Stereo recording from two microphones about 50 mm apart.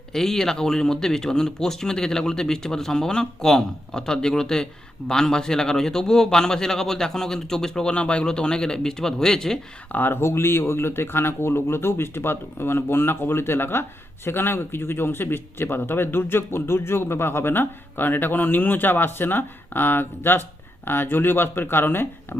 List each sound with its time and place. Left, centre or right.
0.1 s speech: centre
9.9 s speech: left